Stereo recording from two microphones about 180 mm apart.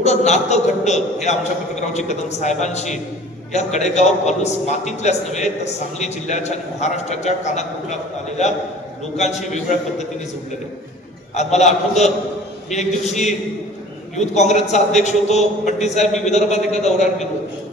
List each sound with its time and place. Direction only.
0.0 s a man's voice: 40° left (ahead or behind)
11.3 s a man's voice: 40° left (ahead or behind)
12.7 s a man's voice: 40° left (ahead or behind)